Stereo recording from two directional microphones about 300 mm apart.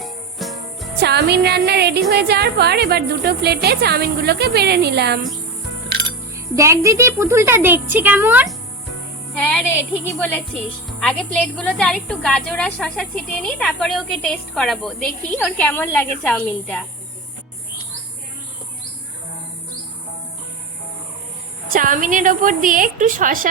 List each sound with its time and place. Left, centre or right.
0.0 s music: centre
0.9 s a woman's voice: right
6.6 s a woman's voice: centre
10.1 s speech: centre
21.7 s a woman's voice: right